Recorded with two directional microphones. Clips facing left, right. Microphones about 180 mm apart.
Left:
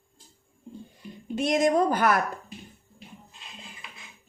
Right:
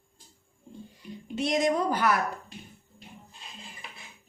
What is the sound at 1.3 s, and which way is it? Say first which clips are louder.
Speech: left 3 dB; 50° left (ahead or behind).